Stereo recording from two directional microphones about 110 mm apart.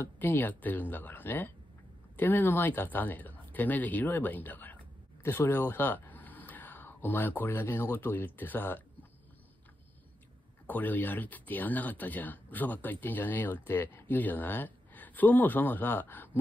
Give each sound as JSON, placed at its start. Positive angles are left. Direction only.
{"t": 0.0, "sound": "speech", "side_deg": 15}
{"t": 10.7, "sound": "speech", "side_deg": 15}